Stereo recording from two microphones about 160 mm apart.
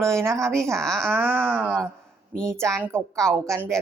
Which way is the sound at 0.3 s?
5° left (ahead or behind).